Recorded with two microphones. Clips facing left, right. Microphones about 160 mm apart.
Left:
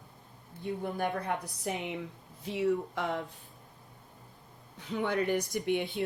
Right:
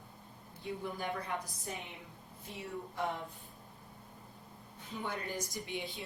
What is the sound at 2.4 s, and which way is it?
Speech, 85° left.